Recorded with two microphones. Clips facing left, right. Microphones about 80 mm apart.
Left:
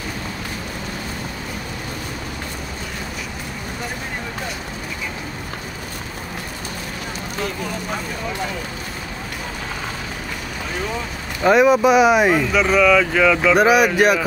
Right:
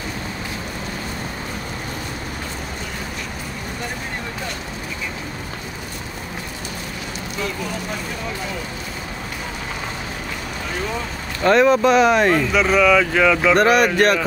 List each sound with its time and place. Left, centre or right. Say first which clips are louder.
11.4 s speech: left 1 dB; centre